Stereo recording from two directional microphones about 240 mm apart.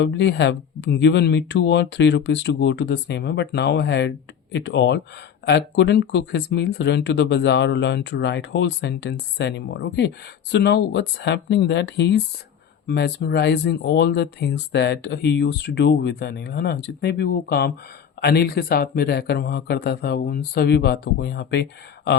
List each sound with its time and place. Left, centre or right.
0.0 s speech: left